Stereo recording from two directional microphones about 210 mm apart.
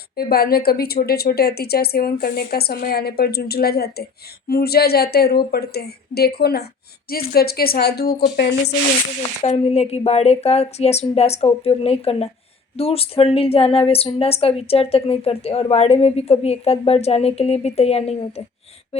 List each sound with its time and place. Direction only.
0.2 s speech: 45° left (ahead or behind)
9.4 s speech: 30° left (ahead or behind)